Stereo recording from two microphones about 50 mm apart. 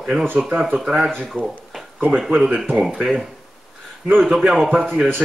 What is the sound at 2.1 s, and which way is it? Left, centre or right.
Speech, centre.